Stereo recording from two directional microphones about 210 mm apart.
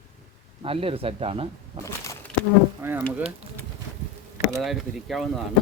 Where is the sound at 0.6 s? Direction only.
25° right (ahead or behind).